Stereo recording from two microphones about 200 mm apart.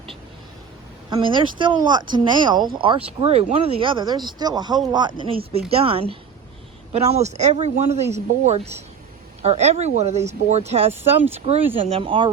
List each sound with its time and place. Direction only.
1.1 s speech: 25° right (ahead or behind)